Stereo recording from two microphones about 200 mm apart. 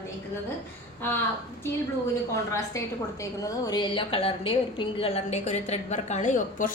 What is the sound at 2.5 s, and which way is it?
A woman's voice, 15° left (ahead or behind).